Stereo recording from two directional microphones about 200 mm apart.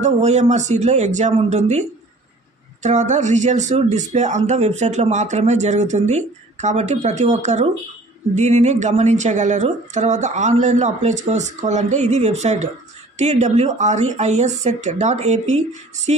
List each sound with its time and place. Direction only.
0.0 s speech: 35° right (ahead or behind)